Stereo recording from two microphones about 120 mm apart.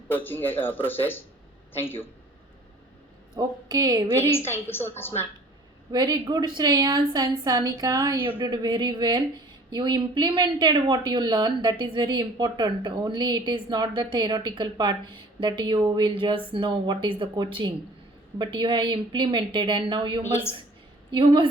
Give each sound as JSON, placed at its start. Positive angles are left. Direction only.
{"t": 0.2, "sound": "speech", "side_deg": 15}
{"t": 3.3, "sound": "a woman's voice", "side_deg": -35}
{"t": 4.3, "sound": "a woman's voice", "side_deg": 20}
{"t": 5.9, "sound": "a woman's voice", "side_deg": -35}